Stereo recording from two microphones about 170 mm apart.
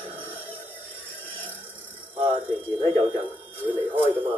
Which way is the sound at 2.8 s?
35° right (ahead or behind).